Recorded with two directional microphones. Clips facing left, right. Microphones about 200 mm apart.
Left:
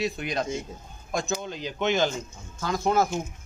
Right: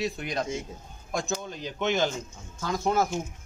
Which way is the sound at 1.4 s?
90° left.